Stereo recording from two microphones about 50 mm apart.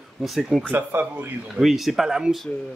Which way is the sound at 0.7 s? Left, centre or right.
Right.